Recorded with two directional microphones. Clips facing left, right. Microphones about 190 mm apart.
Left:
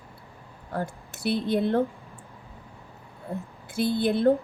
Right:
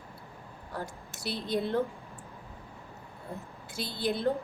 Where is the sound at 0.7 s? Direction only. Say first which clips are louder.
Left 7 dB; 55° left (ahead or behind).